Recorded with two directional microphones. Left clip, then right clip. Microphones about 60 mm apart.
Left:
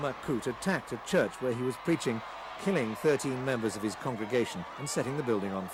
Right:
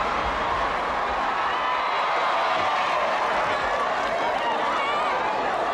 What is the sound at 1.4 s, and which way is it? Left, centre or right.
Speech, right.